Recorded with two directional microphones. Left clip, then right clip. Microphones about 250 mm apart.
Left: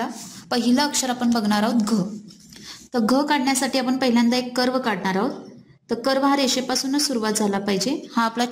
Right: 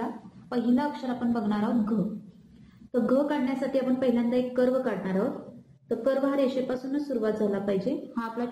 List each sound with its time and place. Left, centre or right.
0.5 s a woman's voice: left
2.9 s a woman's voice: left